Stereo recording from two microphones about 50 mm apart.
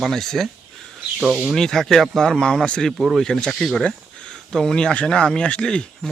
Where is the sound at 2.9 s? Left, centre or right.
Centre.